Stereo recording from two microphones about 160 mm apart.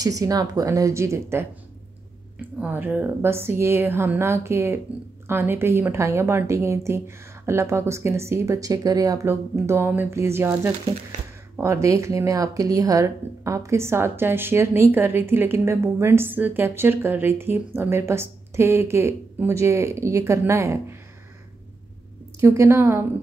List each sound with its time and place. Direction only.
0.0 s speech: 20° right (ahead or behind)
2.6 s speech: 10° right (ahead or behind)
22.4 s speech: 15° right (ahead or behind)